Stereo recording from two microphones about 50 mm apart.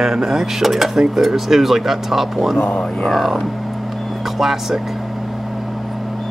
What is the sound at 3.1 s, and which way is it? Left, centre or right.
Speech, centre.